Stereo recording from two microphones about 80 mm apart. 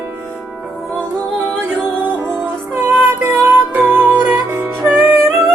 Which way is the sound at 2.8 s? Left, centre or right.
Right.